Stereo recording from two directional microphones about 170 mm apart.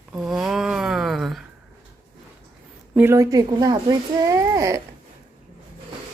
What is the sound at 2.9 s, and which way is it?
A child's voice, 15° right (ahead or behind).